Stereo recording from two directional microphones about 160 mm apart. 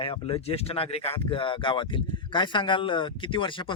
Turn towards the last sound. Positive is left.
turn(degrees=30)  # may be behind; listen again after turning